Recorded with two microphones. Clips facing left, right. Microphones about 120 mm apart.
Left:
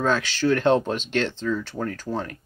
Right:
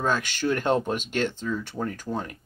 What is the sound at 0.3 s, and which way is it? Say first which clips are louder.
Speech: left 4 dB; 15° right (ahead or behind).